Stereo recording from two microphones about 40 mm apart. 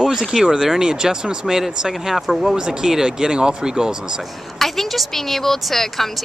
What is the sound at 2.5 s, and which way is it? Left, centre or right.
Speech, right.